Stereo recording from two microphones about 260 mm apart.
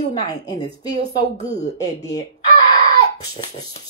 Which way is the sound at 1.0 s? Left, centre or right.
Left.